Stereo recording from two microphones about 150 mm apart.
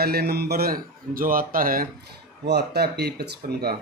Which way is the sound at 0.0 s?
90° right.